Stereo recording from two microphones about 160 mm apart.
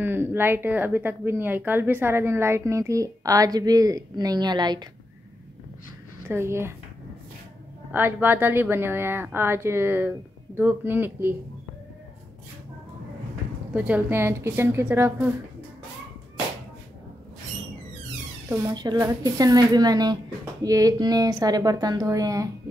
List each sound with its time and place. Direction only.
0.0 s speech: 15° right (ahead or behind)
6.2 s speech: 15° right (ahead or behind)
7.9 s speech: 10° right (ahead or behind)
13.7 s speech: 10° right (ahead or behind)
18.5 s speech: 20° right (ahead or behind)